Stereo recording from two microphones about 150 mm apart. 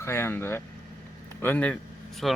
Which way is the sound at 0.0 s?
15° left (ahead or behind).